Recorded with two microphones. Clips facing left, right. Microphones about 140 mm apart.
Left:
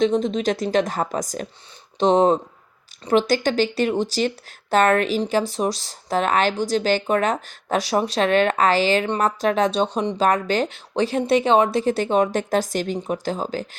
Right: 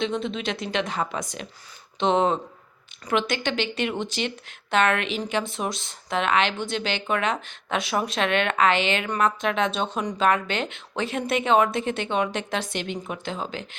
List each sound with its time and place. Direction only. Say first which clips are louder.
0.0 s speech: left 7 dB; 40° left (ahead or behind)